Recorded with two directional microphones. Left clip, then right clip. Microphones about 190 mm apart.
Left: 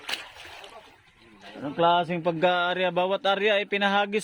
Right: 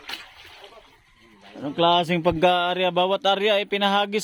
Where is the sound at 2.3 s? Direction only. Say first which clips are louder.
Right 3 dB; 15° right (ahead or behind).